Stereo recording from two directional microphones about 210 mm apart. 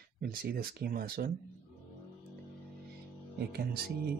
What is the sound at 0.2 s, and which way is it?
Speech, 45° right (ahead or behind).